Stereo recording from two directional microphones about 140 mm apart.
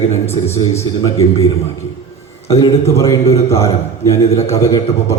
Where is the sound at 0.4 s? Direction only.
20° left (ahead or behind).